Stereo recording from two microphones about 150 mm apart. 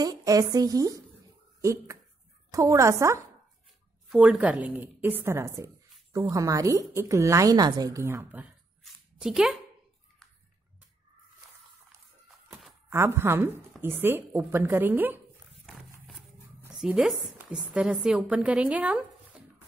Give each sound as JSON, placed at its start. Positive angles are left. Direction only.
{"t": 0.0, "sound": "a woman's voice", "side_deg": -25}
{"t": 4.1, "sound": "a woman's voice", "side_deg": -5}
{"t": 8.8, "sound": "a sound", "side_deg": 0}
{"t": 12.9, "sound": "a woman's voice", "side_deg": -15}
{"t": 15.6, "sound": "a sound", "side_deg": 0}
{"t": 16.8, "sound": "a woman's voice", "side_deg": -5}